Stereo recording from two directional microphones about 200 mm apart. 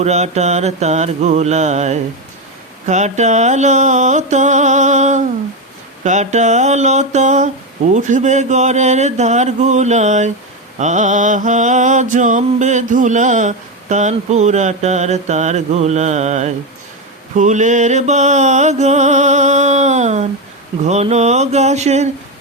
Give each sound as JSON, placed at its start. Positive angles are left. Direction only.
{"t": 0.0, "sound": "mantra", "side_deg": -35}